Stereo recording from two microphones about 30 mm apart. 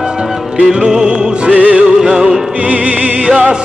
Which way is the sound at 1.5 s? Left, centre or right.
Right.